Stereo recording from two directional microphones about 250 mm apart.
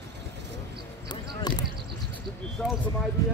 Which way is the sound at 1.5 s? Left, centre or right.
Centre.